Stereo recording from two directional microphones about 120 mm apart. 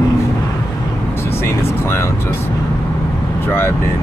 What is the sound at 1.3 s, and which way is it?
Speech, 20° left (ahead or behind).